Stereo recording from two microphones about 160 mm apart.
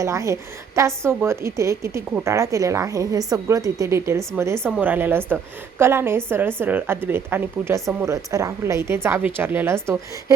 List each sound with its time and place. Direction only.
0.0 s a woman's voice: 20° right (ahead or behind)